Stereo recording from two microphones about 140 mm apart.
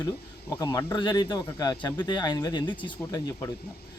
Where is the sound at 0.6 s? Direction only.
20° left (ahead or behind).